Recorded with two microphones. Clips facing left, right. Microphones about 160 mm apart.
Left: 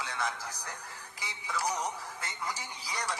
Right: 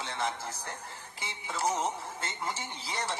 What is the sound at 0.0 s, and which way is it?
Speech, 25° right (ahead or behind).